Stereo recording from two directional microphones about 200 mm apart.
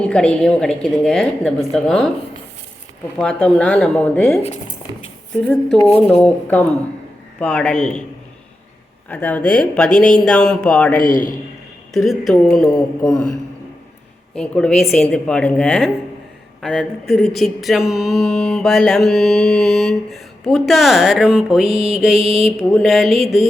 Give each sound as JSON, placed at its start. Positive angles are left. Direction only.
{"t": 0.0, "sound": "mantra", "side_deg": 5}
{"t": 3.2, "sound": "mantra", "side_deg": 5}
{"t": 5.4, "sound": "mantra", "side_deg": 5}
{"t": 6.1, "sound": "speech", "side_deg": 5}
{"t": 7.3, "sound": "mantra", "side_deg": 5}
{"t": 9.0, "sound": "speech", "side_deg": 10}
{"t": 9.5, "sound": "mantra", "side_deg": 5}
{"t": 10.9, "sound": "a man's voice", "side_deg": 45}
{"t": 11.9, "sound": "mantra", "side_deg": 0}